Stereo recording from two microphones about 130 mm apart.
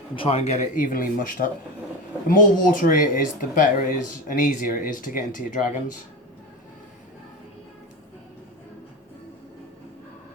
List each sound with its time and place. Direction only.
0.2 s speech: 50° left (ahead or behind); by 5.6 s 90° left